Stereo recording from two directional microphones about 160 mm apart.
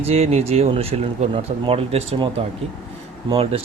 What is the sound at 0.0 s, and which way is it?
Speech, 40° right (ahead or behind).